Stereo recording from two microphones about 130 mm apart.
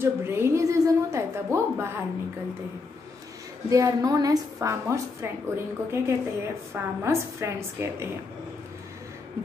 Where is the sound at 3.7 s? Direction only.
25° right (ahead or behind).